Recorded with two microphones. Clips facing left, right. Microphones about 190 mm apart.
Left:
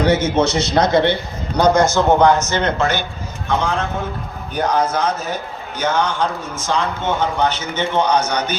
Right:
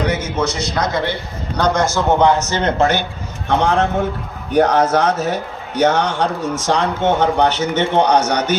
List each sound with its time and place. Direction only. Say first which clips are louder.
0.0 s a man's voice: left 4 dB; 30° left (ahead or behind)
1.5 s a man's voice: left 3 dB; 10° left (ahead or behind)
2.2 s a man's voice: even; 30° right (ahead or behind)
3.5 s a man's voice: right 5 dB; 75° right (ahead or behind)